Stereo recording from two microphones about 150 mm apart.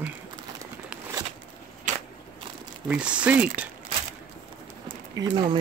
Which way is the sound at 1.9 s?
55° right (ahead or behind).